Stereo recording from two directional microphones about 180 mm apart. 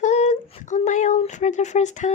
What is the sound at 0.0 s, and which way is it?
Speech, 40° left (ahead or behind).